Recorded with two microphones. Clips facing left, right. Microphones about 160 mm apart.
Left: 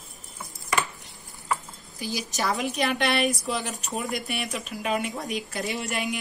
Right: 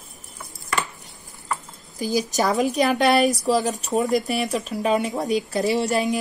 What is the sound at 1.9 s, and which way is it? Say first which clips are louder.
A woman's voice: right 9 dB; 40° right (ahead or behind).